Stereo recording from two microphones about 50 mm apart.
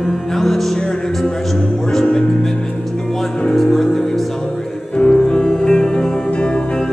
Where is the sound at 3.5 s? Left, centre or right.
Centre.